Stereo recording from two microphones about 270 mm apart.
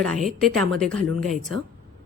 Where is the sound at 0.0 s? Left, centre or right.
Centre.